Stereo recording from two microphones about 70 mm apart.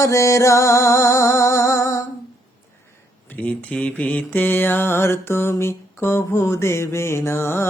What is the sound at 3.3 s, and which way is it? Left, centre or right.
Mantra, left.